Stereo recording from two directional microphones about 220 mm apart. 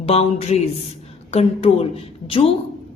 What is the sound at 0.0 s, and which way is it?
Speech, 25° left (ahead or behind).